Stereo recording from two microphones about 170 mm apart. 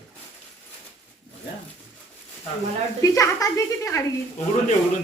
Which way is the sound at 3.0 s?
20° left (ahead or behind).